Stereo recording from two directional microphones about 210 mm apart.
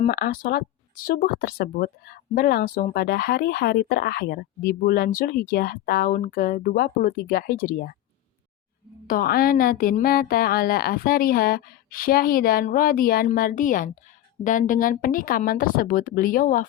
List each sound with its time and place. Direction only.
0.0 s speech: 40° left (ahead or behind)
9.0 s speech: 45° left (ahead or behind)